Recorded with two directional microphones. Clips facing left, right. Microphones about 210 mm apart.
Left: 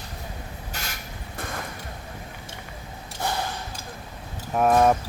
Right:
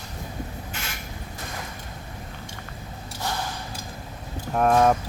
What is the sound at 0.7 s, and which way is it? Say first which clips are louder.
Creak: left 2 dB; 40° left (ahead or behind).